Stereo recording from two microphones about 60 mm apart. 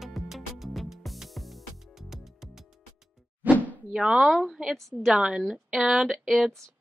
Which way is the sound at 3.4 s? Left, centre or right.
Right.